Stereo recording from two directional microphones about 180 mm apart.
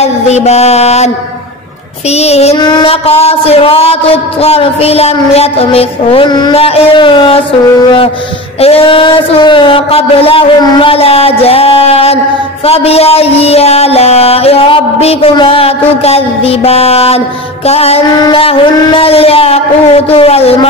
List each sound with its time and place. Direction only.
0.3 s music: 35° left (ahead or behind)
8.5 s music: 35° left (ahead or behind)